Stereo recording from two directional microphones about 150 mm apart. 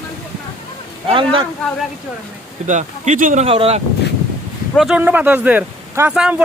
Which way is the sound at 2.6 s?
55° right (ahead or behind).